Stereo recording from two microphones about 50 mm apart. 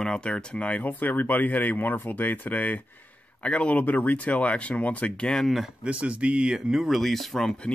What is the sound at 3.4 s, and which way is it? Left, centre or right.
Speech, left.